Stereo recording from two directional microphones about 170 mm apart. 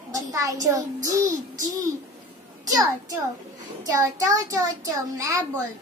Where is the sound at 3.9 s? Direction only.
20° right (ahead or behind).